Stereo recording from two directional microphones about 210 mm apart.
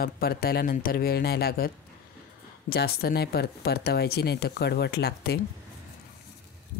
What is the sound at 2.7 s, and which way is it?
Speech, 50° left (ahead or behind).